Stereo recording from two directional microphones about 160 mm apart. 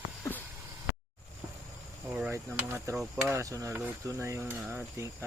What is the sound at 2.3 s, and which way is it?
Speech, 15° right (ahead or behind).